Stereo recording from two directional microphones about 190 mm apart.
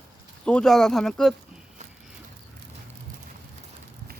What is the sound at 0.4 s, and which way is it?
Speech, 5° left (ahead or behind).